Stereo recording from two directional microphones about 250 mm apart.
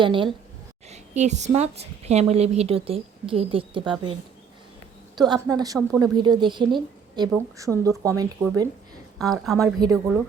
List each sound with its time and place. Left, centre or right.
0.0 s a woman's voice: centre
5.1 s speech: centre
9.1 s a woman's voice: centre
9.6 s speech: centre